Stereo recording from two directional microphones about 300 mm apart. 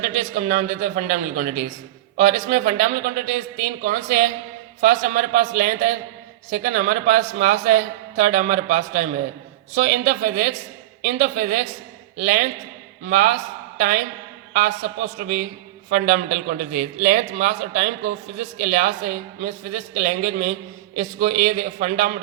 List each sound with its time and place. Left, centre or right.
0.1 s a man's voice: right